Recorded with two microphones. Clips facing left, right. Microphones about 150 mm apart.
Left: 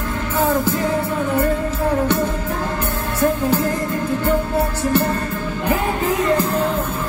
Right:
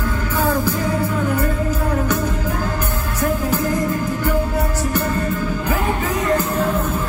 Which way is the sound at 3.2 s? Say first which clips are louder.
Left 3 dB; 30° left (ahead or behind).